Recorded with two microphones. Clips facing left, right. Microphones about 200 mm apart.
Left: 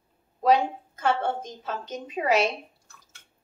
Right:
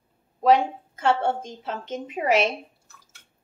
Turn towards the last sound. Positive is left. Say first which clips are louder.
# right 1 dB
turn(degrees=-25)  # may be behind; listen again after turning